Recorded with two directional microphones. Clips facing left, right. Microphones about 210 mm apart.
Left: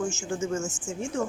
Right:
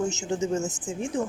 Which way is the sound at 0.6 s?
35° right (ahead or behind).